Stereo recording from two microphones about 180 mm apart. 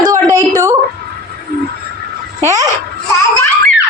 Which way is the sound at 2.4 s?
15° right (ahead or behind).